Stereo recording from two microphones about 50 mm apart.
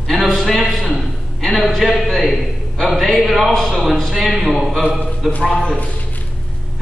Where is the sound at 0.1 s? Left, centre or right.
Centre.